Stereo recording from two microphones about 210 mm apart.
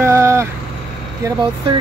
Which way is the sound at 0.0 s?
15° right (ahead or behind).